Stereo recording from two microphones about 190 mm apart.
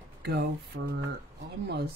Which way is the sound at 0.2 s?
60° right (ahead or behind).